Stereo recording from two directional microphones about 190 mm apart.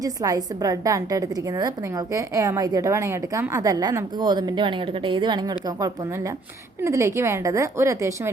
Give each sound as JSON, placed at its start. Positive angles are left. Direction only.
{"t": 0.0, "sound": "a woman's voice", "side_deg": -20}